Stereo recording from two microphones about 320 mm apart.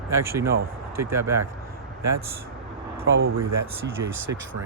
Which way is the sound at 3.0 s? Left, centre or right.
Right.